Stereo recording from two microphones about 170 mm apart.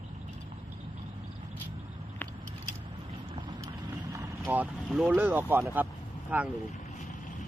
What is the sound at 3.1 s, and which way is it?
Boat, 30° right (ahead or behind).